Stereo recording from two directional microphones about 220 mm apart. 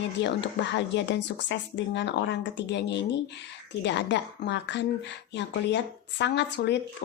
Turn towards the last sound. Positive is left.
turn(degrees=50)  # may be behind; listen again after turning